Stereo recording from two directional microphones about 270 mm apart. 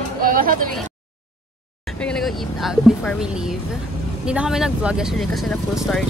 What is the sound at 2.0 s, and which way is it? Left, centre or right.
Speech, centre.